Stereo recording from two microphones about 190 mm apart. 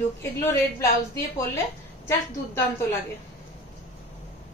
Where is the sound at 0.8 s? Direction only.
15° left (ahead or behind).